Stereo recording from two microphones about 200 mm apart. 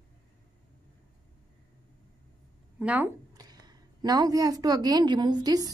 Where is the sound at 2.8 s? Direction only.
10° right (ahead or behind).